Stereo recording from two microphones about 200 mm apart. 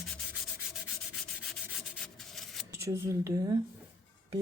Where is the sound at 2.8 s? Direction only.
15° right (ahead or behind).